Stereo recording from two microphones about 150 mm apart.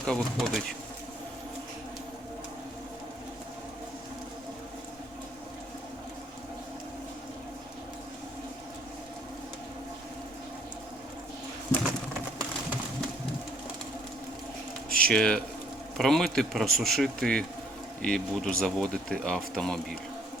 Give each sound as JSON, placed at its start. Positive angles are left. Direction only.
{"t": 0.0, "sound": "speech", "side_deg": 5}
{"t": 11.7, "sound": "bird", "side_deg": 20}
{"t": 14.9, "sound": "speech", "side_deg": 5}